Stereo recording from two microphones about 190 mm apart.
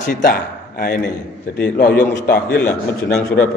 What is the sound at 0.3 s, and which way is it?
A man's voice, 55° left (ahead or behind).